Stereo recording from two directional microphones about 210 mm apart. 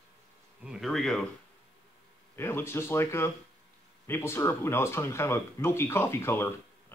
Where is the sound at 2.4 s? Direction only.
10° left (ahead or behind).